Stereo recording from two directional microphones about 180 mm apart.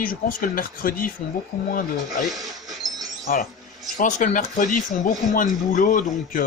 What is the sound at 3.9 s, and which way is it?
Speech, 45° left (ahead or behind).